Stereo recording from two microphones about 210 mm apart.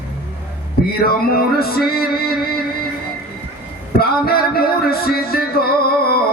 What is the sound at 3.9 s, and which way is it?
Music, 45° left (ahead or behind).